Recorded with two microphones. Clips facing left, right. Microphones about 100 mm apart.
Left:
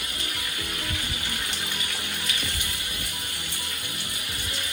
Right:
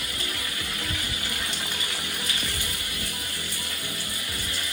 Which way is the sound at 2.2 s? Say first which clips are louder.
Even; 20° left (ahead or behind).